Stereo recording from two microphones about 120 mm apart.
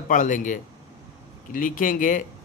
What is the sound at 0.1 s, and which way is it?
Speech, 90° left.